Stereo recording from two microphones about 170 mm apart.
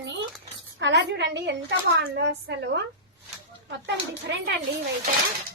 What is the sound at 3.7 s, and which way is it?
Speech, 90° right.